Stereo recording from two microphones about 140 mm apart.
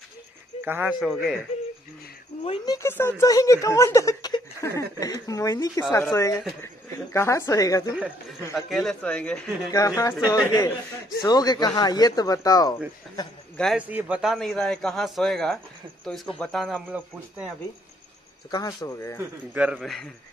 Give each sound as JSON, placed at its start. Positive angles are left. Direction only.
{"t": 0.7, "sound": "speech", "side_deg": -10}
{"t": 1.0, "sound": "a man's voice", "side_deg": 0}
{"t": 2.6, "sound": "speech", "side_deg": 20}
{"t": 8.5, "sound": "a man's voice", "side_deg": 0}
{"t": 9.7, "sound": "speech", "side_deg": 25}
{"t": 13.7, "sound": "a man's voice", "side_deg": -10}
{"t": 18.5, "sound": "speech", "side_deg": 30}
{"t": 19.5, "sound": "a man's voice", "side_deg": -5}